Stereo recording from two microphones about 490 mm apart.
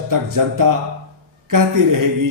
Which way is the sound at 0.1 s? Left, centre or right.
Right.